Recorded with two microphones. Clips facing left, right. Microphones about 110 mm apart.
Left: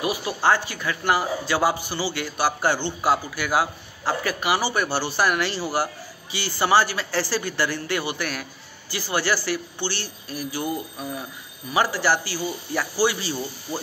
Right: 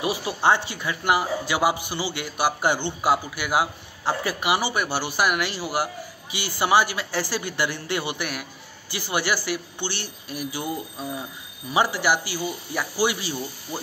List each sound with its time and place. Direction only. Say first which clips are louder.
0.0 s a man's voice: even; 25° right (ahead or behind)
11.7 s a man's voice: even; 20° right (ahead or behind)